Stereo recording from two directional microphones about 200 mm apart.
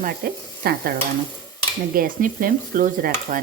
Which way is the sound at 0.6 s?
50° right (ahead or behind).